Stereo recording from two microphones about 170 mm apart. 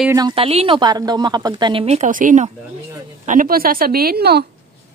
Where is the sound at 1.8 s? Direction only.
40° right (ahead or behind); by 4.4 s 70° right (ahead or behind).